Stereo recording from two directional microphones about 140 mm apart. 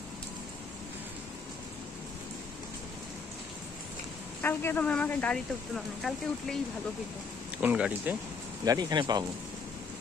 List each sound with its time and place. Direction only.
4.4 s speech: 15° left (ahead or behind)
7.6 s speech: 10° right (ahead or behind)
8.6 s speech: 30° right (ahead or behind)